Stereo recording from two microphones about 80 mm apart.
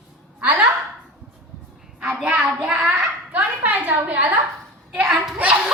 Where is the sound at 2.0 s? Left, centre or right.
Centre.